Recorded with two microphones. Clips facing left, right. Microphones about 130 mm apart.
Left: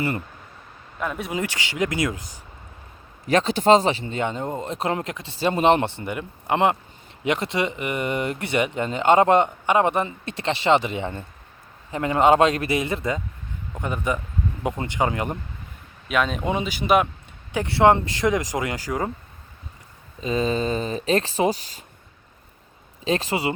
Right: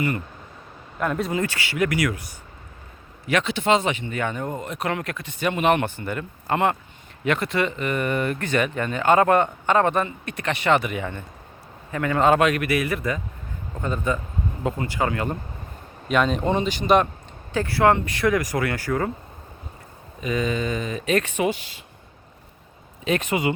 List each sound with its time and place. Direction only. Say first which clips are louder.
0.9 s speech: right 4 dB; centre (ahead or behind)
1.3 s speech: right 2 dB; 15° left (ahead or behind)
3.2 s speech: left 4 dB; 40° left (ahead or behind); by 15.4 s 20° left (ahead or behind)
16.0 s speech: right 2 dB; centre (ahead or behind)
17.5 s speech: left 2 dB; 20° left (ahead or behind)
20.2 s speech: left 2 dB; 30° left (ahead or behind)
23.0 s speech: even; 30° left (ahead or behind)